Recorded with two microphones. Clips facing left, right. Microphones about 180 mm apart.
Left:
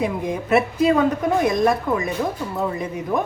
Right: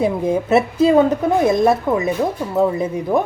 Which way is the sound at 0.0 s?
30° right (ahead or behind).